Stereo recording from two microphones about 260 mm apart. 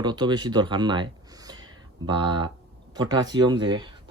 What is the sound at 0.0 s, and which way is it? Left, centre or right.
Speech, centre.